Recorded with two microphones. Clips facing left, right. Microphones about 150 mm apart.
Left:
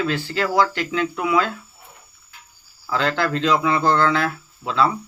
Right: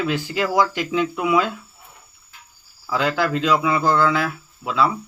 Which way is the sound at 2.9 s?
10° right (ahead or behind).